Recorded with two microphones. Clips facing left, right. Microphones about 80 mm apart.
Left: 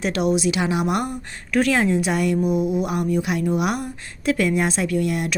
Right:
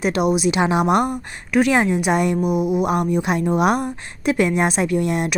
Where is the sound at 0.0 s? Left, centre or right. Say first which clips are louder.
Right 2 dB; centre.